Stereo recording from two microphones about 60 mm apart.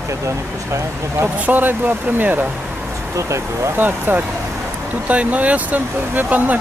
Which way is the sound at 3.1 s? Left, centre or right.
Right.